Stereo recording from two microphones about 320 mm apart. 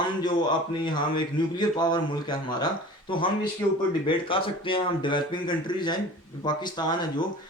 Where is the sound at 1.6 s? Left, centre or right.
Centre.